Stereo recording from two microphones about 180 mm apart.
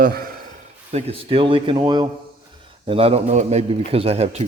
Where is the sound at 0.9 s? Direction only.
30° right (ahead or behind).